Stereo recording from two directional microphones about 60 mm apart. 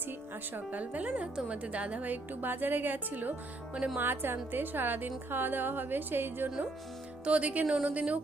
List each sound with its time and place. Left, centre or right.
0.5 s a woman's voice: right
7.3 s speech: right